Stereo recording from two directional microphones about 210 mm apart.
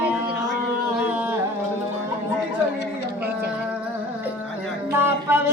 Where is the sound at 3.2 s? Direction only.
50° right (ahead or behind).